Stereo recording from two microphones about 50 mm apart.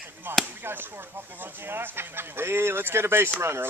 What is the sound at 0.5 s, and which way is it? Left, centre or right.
Speech, right.